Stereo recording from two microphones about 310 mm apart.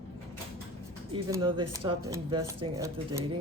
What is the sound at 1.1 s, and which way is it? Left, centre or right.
Speech, centre.